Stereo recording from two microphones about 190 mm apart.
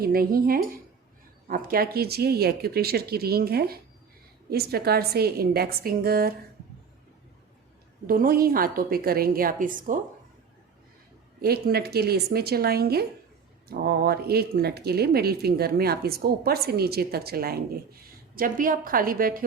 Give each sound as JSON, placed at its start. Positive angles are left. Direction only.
{"t": 0.0, "sound": "a woman's voice", "side_deg": -50}
{"t": 8.0, "sound": "a woman's voice", "side_deg": -50}
{"t": 11.3, "sound": "a woman's voice", "side_deg": -55}